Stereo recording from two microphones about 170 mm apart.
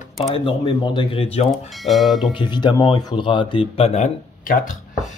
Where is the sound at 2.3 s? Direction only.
25° left (ahead or behind); by 4.6 s 45° left (ahead or behind).